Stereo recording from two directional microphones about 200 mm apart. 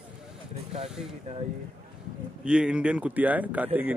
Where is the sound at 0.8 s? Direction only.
Centre (ahead or behind).